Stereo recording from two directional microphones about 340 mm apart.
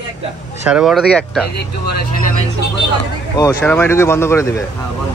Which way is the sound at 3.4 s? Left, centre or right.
Centre.